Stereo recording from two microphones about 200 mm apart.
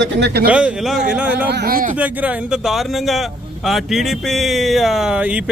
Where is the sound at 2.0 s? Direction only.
10° right (ahead or behind).